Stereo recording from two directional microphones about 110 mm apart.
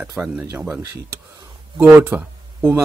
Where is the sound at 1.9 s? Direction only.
15° right (ahead or behind).